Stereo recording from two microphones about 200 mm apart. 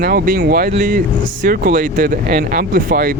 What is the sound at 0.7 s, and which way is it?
Speech, 40° right (ahead or behind).